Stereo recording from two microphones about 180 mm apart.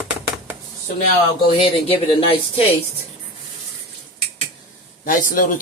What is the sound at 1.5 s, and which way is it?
Speech, 30° left (ahead or behind).